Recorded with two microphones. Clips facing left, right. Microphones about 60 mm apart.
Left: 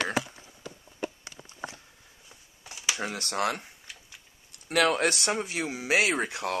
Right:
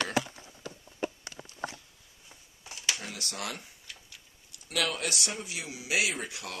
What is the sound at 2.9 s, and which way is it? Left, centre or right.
Speech, left.